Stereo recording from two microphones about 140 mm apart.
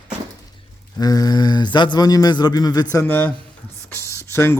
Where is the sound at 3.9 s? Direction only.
20° left (ahead or behind).